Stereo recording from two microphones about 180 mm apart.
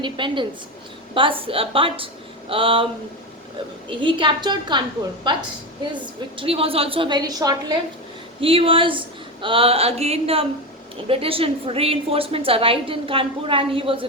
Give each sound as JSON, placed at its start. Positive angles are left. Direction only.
{"t": 0.0, "sound": "a woman's voice", "side_deg": -25}
{"t": 5.9, "sound": "a woman's voice", "side_deg": -30}